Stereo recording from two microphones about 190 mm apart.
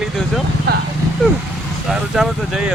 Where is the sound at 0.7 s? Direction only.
55° right (ahead or behind).